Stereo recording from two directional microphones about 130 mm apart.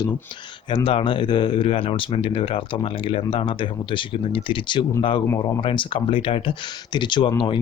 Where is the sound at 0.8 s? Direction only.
40° left (ahead or behind).